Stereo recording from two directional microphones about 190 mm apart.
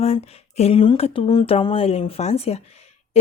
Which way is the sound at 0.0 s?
35° left (ahead or behind).